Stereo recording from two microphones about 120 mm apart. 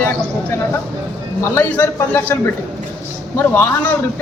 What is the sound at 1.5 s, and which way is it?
Speech, 15° left (ahead or behind).